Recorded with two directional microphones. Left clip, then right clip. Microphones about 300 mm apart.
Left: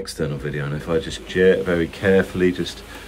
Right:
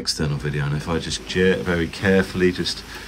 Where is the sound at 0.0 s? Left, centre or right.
Centre.